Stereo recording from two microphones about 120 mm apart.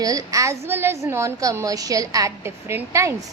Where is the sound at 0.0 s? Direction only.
30° right (ahead or behind).